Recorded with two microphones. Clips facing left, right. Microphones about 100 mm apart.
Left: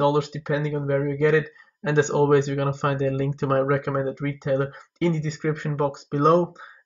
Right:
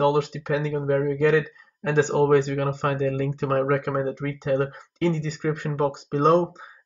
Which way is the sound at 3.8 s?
Centre (ahead or behind).